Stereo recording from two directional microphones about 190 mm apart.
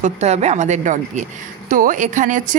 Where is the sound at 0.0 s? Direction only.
35° right (ahead or behind).